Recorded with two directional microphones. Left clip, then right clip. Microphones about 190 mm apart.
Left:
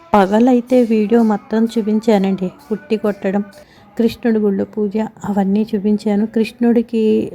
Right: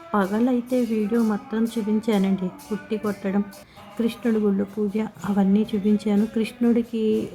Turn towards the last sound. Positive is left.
turn(degrees=30)  # may be behind; listen again after turning